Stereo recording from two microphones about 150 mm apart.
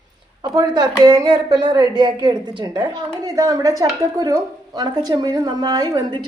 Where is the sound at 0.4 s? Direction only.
30° right (ahead or behind).